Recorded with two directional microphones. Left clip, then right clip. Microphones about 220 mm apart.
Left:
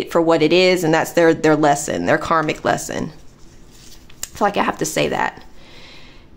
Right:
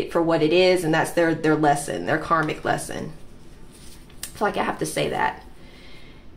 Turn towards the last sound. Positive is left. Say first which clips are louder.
# left 4 dB
turn(degrees=40)  # may be behind; listen again after turning